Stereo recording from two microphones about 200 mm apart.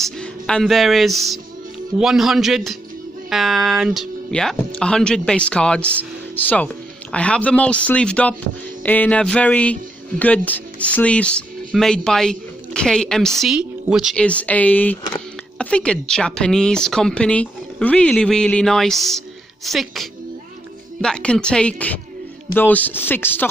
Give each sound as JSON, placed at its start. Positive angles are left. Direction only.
{"t": 0.0, "sound": "a man's voice", "side_deg": 5}